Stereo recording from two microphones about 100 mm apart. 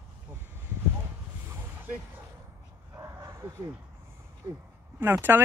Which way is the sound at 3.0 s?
30° right (ahead or behind).